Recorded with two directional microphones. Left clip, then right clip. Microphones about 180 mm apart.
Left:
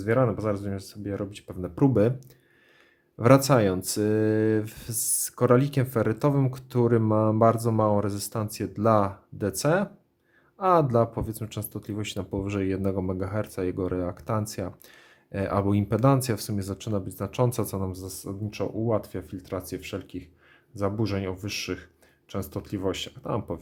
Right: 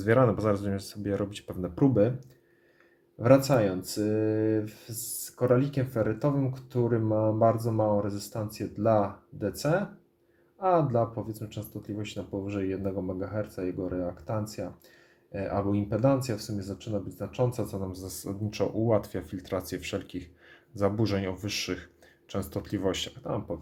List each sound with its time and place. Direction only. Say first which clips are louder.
0.0 s speech: right 1 dB; 5° left (ahead or behind)
1.7 s speech: left 2 dB; 25° left (ahead or behind)
3.2 s speech: left 2 dB; 35° left (ahead or behind)
18.0 s speech: even; 10° left (ahead or behind)